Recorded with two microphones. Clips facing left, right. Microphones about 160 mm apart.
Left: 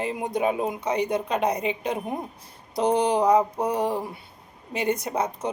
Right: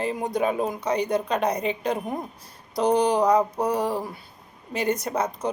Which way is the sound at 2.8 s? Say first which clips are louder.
Right 1 dB; 25° left (ahead or behind).